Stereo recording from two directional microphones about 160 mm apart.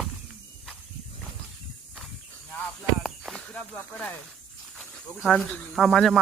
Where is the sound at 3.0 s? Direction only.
5° left (ahead or behind).